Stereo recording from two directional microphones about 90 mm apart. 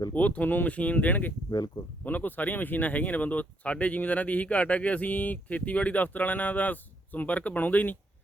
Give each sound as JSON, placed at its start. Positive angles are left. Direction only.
{"t": 0.1, "sound": "speech", "side_deg": 15}
{"t": 1.5, "sound": "speech", "side_deg": 45}
{"t": 2.0, "sound": "speech", "side_deg": 20}